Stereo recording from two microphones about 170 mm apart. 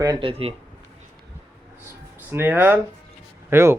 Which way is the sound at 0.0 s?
25° right (ahead or behind).